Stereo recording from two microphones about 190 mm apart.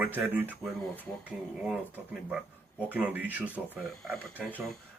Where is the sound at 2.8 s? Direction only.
10° right (ahead or behind).